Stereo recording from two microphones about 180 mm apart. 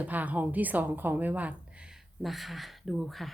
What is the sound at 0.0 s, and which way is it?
A woman's voice, 10° right (ahead or behind).